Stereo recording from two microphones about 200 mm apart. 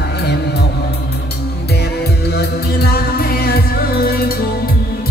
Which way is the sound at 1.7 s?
55° left (ahead or behind).